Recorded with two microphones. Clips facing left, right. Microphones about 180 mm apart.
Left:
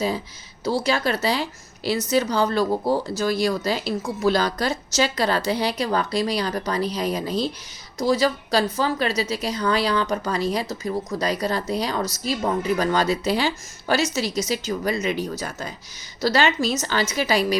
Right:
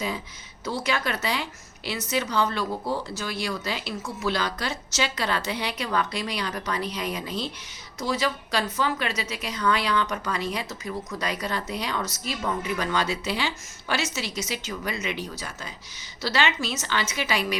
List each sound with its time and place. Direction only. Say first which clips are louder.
0.6 s a woman's voice: left 6 dB; 35° left (ahead or behind)